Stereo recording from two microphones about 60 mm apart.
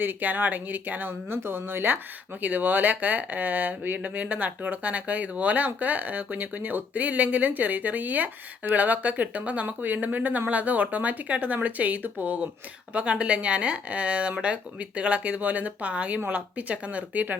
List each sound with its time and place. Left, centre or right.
0.0 s speech: right